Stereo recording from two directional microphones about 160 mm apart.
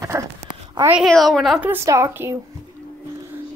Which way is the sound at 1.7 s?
15° right (ahead or behind).